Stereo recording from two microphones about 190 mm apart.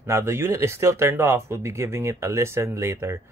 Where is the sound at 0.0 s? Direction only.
15° right (ahead or behind).